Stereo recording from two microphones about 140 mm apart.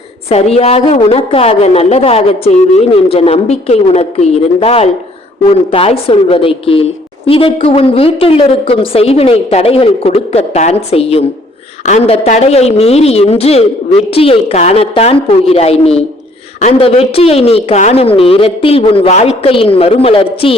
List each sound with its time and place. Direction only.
0.3 s a woman's voice: 50° left (ahead or behind)